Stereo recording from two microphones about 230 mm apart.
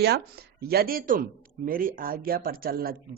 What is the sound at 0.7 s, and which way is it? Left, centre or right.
Speech, right.